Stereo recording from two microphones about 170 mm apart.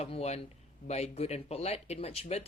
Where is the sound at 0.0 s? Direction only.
40° left (ahead or behind).